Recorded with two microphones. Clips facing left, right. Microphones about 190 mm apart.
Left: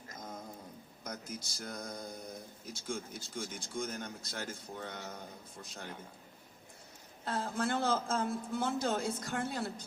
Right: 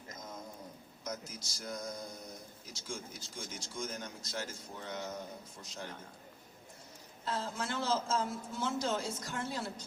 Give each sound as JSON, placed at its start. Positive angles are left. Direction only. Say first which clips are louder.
{"t": 1.0, "sound": "a man's voice", "louder": "right 1 dB", "side_deg": 55}
{"t": 7.3, "sound": "a man's voice", "louder": "left 3 dB", "side_deg": 55}